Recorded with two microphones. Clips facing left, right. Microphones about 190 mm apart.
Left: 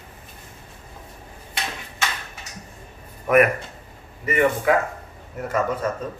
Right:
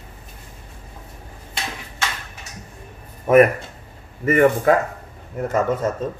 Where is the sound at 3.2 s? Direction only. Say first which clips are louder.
Right 4 dB; 25° right (ahead or behind).